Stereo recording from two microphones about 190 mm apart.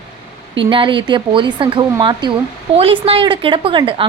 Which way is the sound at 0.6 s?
25° right (ahead or behind).